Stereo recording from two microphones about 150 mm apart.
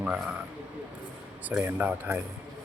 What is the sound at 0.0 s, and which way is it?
Speech, 5° right (ahead or behind).